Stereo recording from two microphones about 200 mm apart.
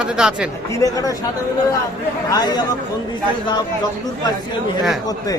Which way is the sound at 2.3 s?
20° left (ahead or behind).